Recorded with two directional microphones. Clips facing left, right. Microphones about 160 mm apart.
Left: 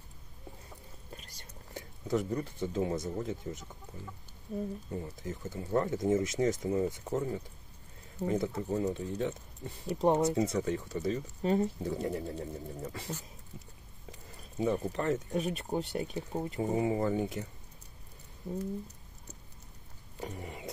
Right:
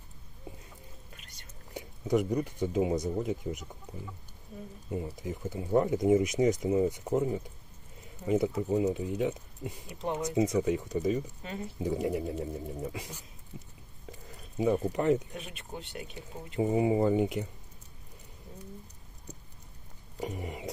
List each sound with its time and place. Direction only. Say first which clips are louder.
1.1 s whispering: left 5 dB; 35° left (ahead or behind)
1.7 s speech: right 4 dB; 15° right (ahead or behind)
4.9 s speech: right 3 dB; 15° right (ahead or behind)
9.8 s speech: left 8 dB; 40° left (ahead or behind)
10.3 s speech: right 3 dB; 15° right (ahead or behind)
11.4 s speech: left 10 dB; 40° left (ahead or behind)
11.8 s speech: right 3 dB; 15° right (ahead or behind)
13.5 s a sound: right 4 dB; 15° right (ahead or behind)
14.6 s speech: right 3 dB; 15° right (ahead or behind)
15.3 s speech: left 10 dB; 40° left (ahead or behind)
16.5 s speech: right 5 dB; 15° right (ahead or behind)
20.2 s speech: right 4 dB; 15° right (ahead or behind)